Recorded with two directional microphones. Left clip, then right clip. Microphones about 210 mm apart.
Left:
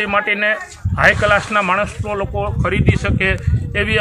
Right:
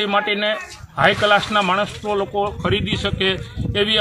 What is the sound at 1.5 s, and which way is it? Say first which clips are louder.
Speech: left 2 dB; 15° left (ahead or behind).